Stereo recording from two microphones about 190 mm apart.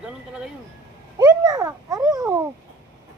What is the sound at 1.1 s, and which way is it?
A child's voice, 20° right (ahead or behind).